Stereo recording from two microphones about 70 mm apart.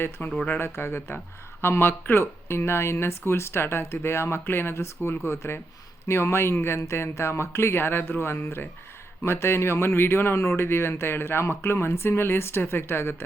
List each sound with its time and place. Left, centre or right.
0.3 s speech: left
0.6 s speech: left